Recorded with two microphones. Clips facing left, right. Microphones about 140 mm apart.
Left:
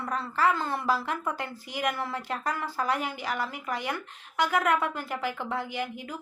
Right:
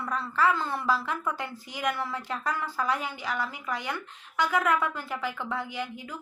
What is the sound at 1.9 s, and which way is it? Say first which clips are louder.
Speech: right 2 dB; 45° left (ahead or behind).